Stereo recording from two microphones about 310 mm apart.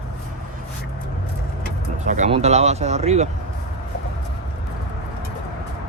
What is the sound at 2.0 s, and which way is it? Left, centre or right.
Speech, right.